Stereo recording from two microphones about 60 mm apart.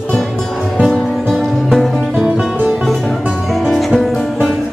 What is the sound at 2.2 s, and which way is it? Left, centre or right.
Music, centre.